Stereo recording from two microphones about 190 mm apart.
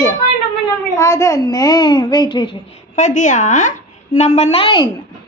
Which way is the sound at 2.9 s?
40° left (ahead or behind).